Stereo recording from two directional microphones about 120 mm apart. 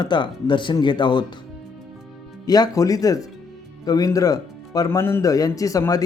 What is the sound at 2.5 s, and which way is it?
Speech, 35° left (ahead or behind).